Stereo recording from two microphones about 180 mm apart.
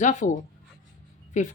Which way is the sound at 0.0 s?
45° left (ahead or behind).